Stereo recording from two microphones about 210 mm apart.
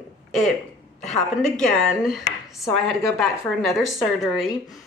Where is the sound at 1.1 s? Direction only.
Centre (ahead or behind).